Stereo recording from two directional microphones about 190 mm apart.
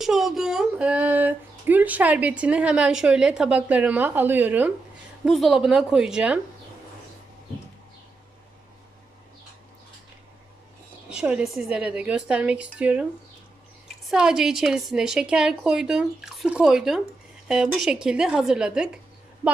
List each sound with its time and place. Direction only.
0.0 s a woman's voice: centre (ahead or behind)
11.1 s a woman's voice: 5° right (ahead or behind)
14.1 s a woman's voice: 5° right (ahead or behind)